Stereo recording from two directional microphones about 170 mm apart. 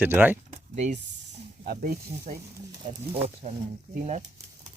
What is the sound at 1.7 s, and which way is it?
Speech, 60° right (ahead or behind).